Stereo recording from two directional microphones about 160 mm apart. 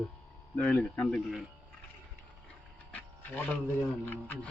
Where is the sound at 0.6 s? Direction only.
10° left (ahead or behind).